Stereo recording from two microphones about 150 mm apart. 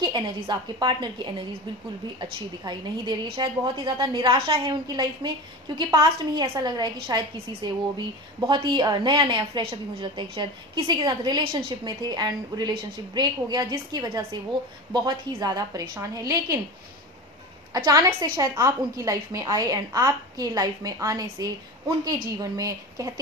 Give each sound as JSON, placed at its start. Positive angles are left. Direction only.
{"t": 0.5, "sound": "a woman's voice", "side_deg": -30}
{"t": 17.7, "sound": "a woman's voice", "side_deg": -25}